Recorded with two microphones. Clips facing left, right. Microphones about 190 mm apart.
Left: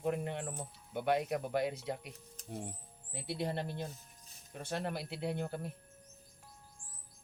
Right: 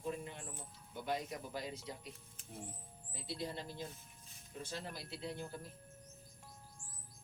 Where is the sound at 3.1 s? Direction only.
65° left (ahead or behind).